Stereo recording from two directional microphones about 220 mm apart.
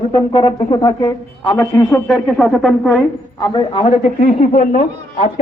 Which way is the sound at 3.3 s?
20° left (ahead or behind).